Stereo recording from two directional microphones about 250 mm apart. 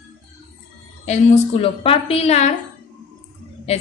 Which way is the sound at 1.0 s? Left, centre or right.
Left.